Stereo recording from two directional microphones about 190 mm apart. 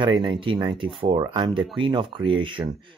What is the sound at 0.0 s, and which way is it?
Speech, 25° right (ahead or behind).